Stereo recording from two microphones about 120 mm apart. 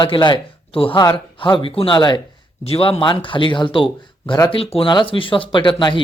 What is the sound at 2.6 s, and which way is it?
Speech, 50° left (ahead or behind).